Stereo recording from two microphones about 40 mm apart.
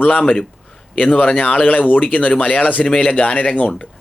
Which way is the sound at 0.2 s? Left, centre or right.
Left.